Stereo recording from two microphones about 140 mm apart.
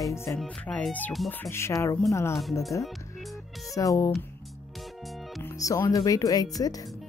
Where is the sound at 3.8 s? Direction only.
25° left (ahead or behind).